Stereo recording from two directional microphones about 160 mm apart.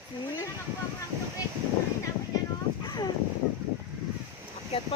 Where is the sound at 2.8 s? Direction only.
25° left (ahead or behind).